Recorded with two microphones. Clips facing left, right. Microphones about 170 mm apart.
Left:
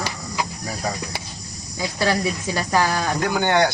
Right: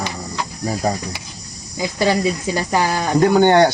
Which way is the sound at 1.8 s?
20° right (ahead or behind).